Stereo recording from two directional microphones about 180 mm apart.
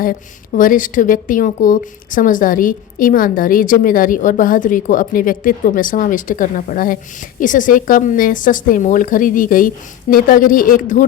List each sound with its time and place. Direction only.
0.0 s a woman's voice: 50° left (ahead or behind)